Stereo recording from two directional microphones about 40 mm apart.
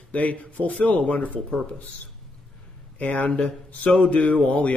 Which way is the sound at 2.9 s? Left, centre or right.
Left.